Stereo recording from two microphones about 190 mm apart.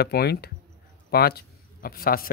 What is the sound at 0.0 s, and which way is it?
Speech, 55° left (ahead or behind).